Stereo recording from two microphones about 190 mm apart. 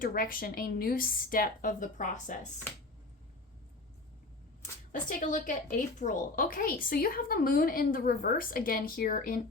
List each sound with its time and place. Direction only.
0.0 s a woman's voice: 50° left (ahead or behind)
4.9 s a woman's voice: 40° left (ahead or behind)